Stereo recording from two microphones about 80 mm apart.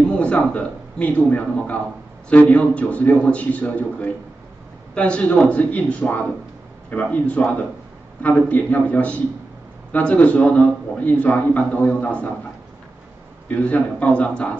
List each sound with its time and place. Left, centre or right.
0.1 s a man's voice: centre
13.5 s a man's voice: centre